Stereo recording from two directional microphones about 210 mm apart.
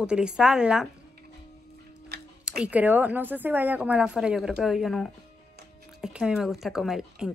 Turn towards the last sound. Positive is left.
turn(degrees=0)  # may be behind; listen again after turning